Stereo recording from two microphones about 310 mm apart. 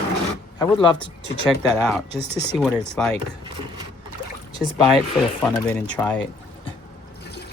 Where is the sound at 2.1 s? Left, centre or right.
Centre.